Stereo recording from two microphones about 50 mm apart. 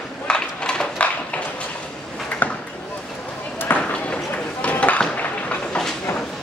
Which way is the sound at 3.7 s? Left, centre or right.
Left.